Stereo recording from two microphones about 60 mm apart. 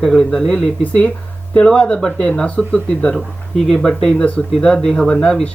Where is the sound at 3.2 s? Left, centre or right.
Centre.